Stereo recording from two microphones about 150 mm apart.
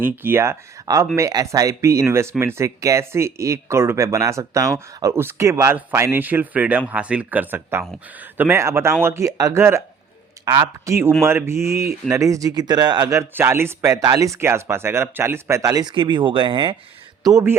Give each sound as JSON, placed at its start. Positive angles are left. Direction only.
{"t": 0.0, "sound": "speech", "side_deg": -15}
{"t": 17.2, "sound": "speech", "side_deg": -20}